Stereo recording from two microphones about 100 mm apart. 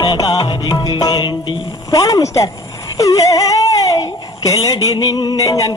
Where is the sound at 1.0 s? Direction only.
50° left (ahead or behind).